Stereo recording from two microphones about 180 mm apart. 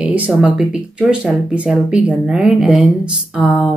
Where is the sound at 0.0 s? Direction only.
5° right (ahead or behind).